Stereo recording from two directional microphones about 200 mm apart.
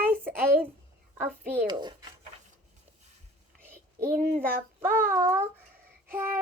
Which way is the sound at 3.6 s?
10° right (ahead or behind).